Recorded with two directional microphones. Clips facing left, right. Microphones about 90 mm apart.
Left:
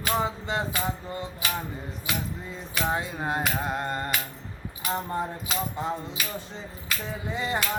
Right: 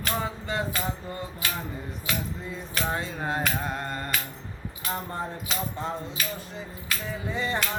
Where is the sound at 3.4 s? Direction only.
15° left (ahead or behind).